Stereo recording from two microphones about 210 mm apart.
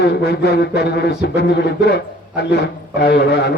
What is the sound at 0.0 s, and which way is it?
A man's voice, 50° left (ahead or behind).